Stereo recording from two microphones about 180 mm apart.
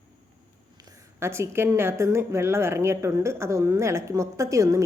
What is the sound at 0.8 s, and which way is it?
A woman's voice, 20° right (ahead or behind).